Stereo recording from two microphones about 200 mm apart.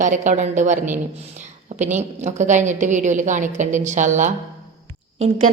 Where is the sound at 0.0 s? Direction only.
40° right (ahead or behind).